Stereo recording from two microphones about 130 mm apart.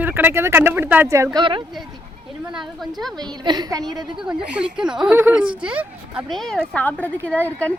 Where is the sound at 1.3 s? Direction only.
40° right (ahead or behind).